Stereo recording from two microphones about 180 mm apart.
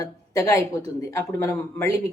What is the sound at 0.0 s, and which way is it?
A woman's voice, 15° left (ahead or behind).